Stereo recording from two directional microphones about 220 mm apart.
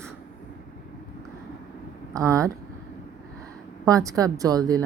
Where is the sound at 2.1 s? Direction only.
15° right (ahead or behind).